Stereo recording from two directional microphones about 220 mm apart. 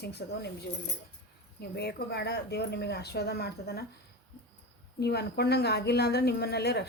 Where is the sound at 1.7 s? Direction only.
45° left (ahead or behind).